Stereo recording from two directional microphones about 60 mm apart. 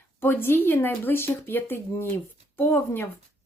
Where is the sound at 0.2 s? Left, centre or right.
Left.